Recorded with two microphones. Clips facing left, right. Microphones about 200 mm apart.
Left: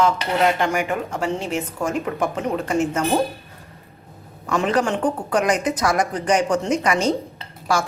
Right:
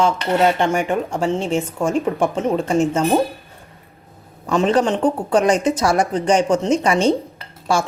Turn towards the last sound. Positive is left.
turn(degrees=-25)  # may be behind; listen again after turning